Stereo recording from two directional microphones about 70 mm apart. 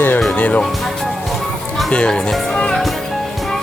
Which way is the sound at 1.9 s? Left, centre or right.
Centre.